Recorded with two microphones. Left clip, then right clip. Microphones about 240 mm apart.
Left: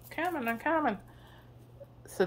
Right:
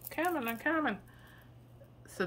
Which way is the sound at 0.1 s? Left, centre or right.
Centre.